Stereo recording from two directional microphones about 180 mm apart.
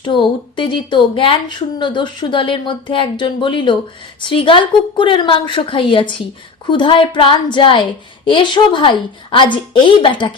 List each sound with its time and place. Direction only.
0.0 s a woman's voice: 25° left (ahead or behind)